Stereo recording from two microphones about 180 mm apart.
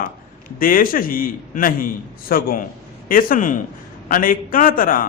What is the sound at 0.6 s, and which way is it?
A man's voice, 50° left (ahead or behind).